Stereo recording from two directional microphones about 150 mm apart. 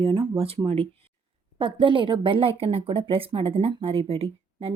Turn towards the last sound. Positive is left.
turn(degrees=-40)  # may be behind; listen again after turning